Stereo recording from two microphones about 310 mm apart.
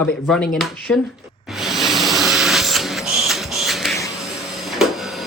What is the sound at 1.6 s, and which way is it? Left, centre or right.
Printer, centre.